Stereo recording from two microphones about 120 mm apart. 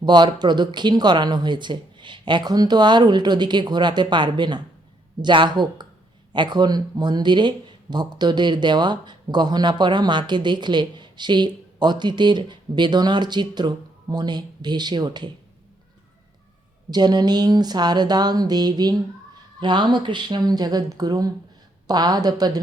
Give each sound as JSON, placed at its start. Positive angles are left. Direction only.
{"t": 0.0, "sound": "speech", "side_deg": -35}
{"t": 16.9, "sound": "speech", "side_deg": -35}